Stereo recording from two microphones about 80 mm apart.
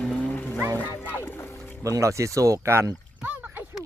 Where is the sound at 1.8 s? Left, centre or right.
Right.